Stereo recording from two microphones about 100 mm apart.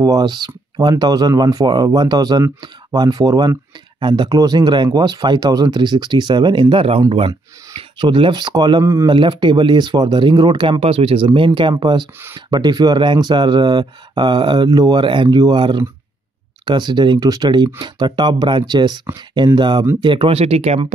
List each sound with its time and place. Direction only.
0.0 s speech: 40° right (ahead or behind)
4.0 s speech: 50° right (ahead or behind)
15.0 s speech: 55° right (ahead or behind)
15.2 s speech: 40° right (ahead or behind)
15.5 s speech: 50° right (ahead or behind); by 20.8 s 90° right